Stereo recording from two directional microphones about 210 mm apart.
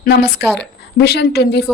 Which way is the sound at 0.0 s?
50° left (ahead or behind).